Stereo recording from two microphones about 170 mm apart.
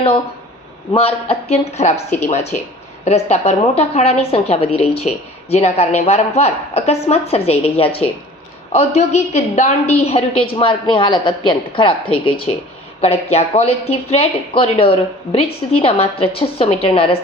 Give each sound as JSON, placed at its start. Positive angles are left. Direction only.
{"t": 0.9, "sound": "a woman's voice", "side_deg": 35}